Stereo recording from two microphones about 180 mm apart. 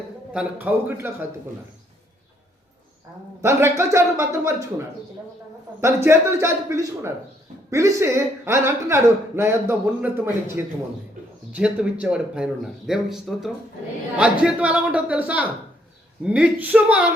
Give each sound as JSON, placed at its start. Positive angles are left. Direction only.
{"t": 0.3, "sound": "speech", "side_deg": -10}
{"t": 3.4, "sound": "speech", "side_deg": -15}
{"t": 5.8, "sound": "speech", "side_deg": -15}